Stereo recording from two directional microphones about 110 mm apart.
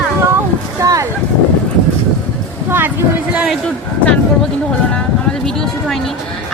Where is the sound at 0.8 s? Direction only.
30° right (ahead or behind).